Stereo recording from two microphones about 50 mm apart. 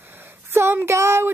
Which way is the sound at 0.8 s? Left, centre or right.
Right.